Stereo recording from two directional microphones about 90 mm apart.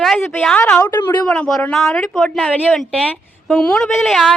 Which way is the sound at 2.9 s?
10° left (ahead or behind).